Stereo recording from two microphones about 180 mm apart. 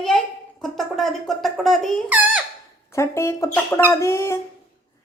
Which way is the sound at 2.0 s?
10° right (ahead or behind).